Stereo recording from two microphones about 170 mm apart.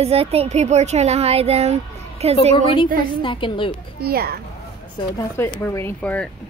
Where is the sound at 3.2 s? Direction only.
30° left (ahead or behind).